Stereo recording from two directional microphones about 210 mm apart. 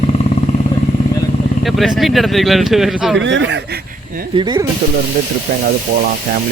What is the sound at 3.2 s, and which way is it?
Speech, 60° right (ahead or behind).